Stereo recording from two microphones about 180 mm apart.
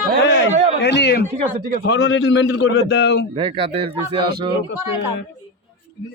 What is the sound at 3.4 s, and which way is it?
Speech, 30° right (ahead or behind).